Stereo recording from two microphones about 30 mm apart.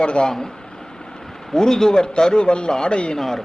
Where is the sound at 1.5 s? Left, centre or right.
Centre.